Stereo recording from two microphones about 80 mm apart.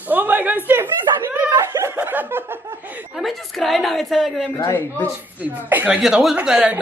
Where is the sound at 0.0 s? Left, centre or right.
Right.